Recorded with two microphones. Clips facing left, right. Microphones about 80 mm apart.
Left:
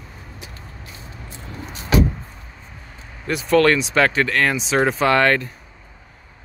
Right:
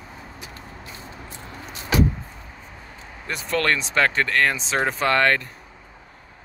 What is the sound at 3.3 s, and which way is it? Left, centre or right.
Speech, centre.